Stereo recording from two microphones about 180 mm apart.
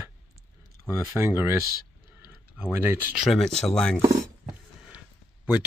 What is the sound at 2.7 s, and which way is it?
Speech, 15° right (ahead or behind).